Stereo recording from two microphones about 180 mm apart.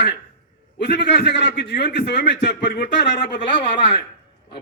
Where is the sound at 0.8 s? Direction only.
70° left (ahead or behind).